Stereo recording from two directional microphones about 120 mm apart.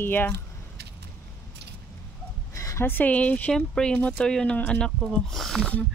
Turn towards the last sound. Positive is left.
turn(degrees=5)  # may be behind; listen again after turning